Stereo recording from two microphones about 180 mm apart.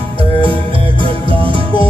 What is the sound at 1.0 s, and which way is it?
Music, 30° right (ahead or behind).